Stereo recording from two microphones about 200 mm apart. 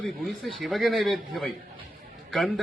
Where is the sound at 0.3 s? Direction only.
Centre (ahead or behind).